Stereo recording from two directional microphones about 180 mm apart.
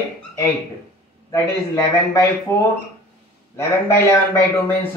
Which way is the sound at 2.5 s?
15° left (ahead or behind).